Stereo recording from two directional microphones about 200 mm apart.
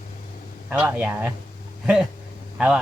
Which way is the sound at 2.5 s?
5° right (ahead or behind).